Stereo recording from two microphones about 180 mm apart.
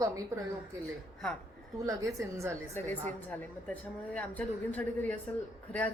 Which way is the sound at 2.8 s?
10° left (ahead or behind).